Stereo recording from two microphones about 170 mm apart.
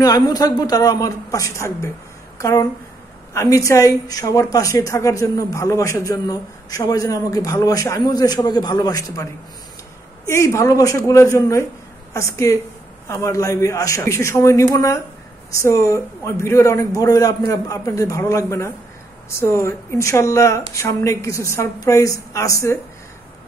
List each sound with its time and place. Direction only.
0.0 s a woman's voice: 20° left (ahead or behind)